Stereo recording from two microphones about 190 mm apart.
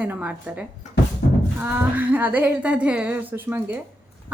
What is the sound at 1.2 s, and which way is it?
Music, 60° left (ahead or behind).